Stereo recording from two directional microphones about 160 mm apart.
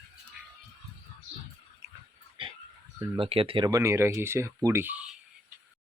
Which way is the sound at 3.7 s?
20° right (ahead or behind).